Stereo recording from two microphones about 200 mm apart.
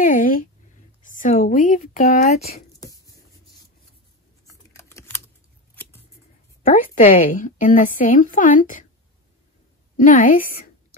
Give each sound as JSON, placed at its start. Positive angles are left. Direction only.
{"t": 0.1, "sound": "a sound", "side_deg": 45}
{"t": 1.0, "sound": "speech", "side_deg": 40}
{"t": 2.8, "sound": "a sound", "side_deg": 15}
{"t": 4.5, "sound": "computer keyboard", "side_deg": 15}
{"t": 6.6, "sound": "a woman's voice", "side_deg": 40}
{"t": 9.9, "sound": "a woman's voice", "side_deg": 40}